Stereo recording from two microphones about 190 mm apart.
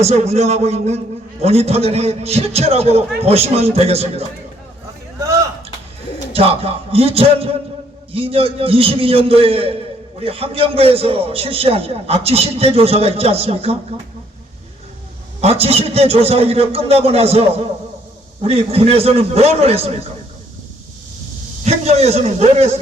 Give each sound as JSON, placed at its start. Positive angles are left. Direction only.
{"t": 0.0, "sound": "a man's voice", "side_deg": -35}
{"t": 6.3, "sound": "a man's voice", "side_deg": -30}
{"t": 15.4, "sound": "a man's voice", "side_deg": -30}
{"t": 21.6, "sound": "a man's voice", "side_deg": -35}